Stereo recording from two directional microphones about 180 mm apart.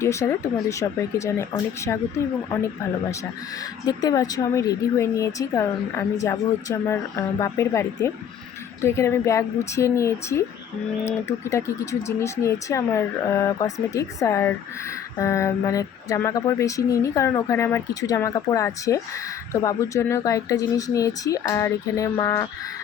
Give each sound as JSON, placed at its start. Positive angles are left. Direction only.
{"t": 0.0, "sound": "speech", "side_deg": 15}
{"t": 3.8, "sound": "speech", "side_deg": 20}